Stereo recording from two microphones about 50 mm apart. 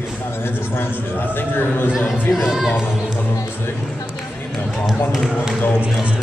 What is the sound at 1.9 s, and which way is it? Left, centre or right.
Speech, centre.